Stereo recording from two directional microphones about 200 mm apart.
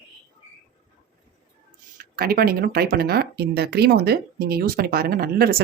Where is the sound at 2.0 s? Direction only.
50° right (ahead or behind).